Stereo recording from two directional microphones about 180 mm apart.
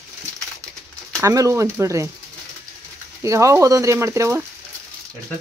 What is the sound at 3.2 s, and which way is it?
Speech, 15° right (ahead or behind).